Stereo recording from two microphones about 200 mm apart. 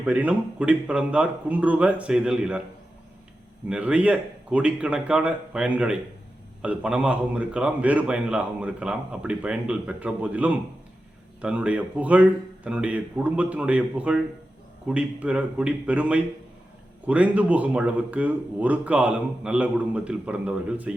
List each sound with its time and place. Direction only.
0.0 s a man's voice: 5° right (ahead or behind)
3.7 s a man's voice: 5° right (ahead or behind)